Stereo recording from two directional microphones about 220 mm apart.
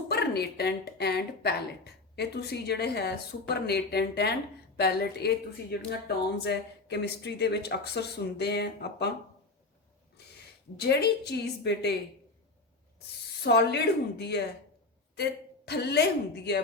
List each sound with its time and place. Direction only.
0.1 s a woman's voice: 45° left (ahead or behind)
10.8 s a woman's voice: 50° left (ahead or behind)
13.4 s a woman's voice: 50° left (ahead or behind)